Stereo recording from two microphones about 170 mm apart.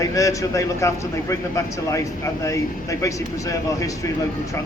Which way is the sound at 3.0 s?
20° left (ahead or behind).